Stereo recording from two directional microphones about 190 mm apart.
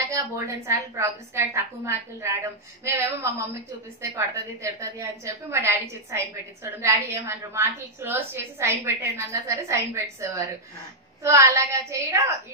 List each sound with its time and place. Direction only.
0.1 s a woman's voice: 15° right (ahead or behind)